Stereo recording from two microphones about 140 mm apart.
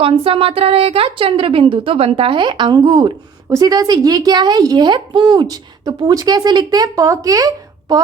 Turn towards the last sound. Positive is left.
turn(degrees=-25)  # may be behind; listen again after turning